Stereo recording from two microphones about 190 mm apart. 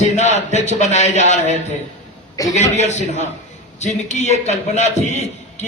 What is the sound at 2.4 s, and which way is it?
Speech, 20° left (ahead or behind).